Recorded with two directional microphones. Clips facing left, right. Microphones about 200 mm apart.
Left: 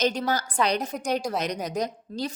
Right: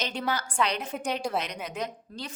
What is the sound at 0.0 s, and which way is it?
A woman's voice, 40° left (ahead or behind).